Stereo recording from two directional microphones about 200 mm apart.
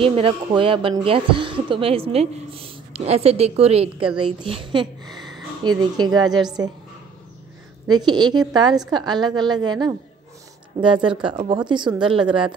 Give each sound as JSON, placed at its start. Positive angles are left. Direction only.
{"t": 0.0, "sound": "a woman's voice", "side_deg": -30}
{"t": 7.8, "sound": "a woman's voice", "side_deg": -20}